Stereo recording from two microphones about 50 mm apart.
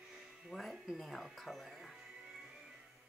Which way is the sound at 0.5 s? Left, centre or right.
Centre.